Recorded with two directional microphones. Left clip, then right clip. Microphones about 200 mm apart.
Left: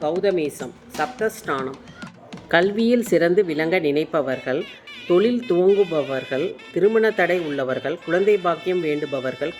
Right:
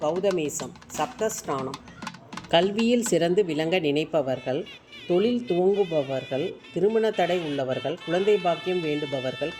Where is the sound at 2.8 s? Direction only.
25° right (ahead or behind).